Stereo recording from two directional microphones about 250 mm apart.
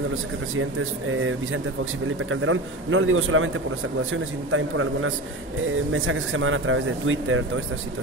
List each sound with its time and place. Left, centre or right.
1.1 s speech: right